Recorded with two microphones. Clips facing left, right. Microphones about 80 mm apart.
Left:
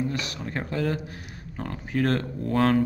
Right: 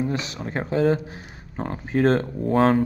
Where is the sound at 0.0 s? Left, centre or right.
Right.